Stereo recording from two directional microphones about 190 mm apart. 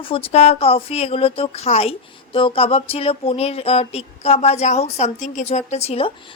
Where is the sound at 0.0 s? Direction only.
30° left (ahead or behind).